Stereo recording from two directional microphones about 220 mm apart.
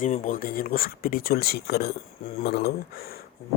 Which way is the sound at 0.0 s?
35° left (ahead or behind).